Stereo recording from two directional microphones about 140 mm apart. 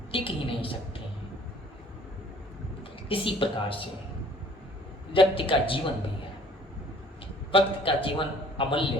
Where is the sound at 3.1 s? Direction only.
40° left (ahead or behind).